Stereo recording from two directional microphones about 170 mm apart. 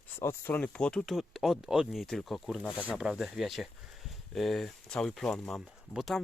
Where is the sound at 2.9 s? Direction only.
Centre (ahead or behind).